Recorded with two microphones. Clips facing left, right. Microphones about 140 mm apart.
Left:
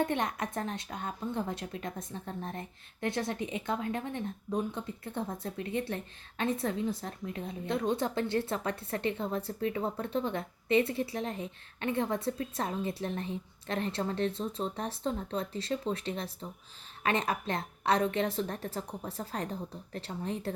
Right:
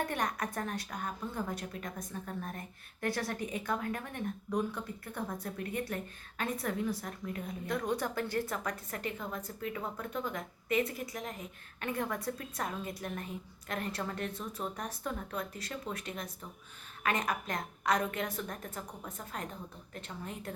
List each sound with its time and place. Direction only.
0.0 s a woman's voice: 25° left (ahead or behind)